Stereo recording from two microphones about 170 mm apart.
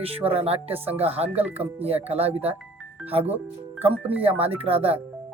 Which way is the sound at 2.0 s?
35° right (ahead or behind).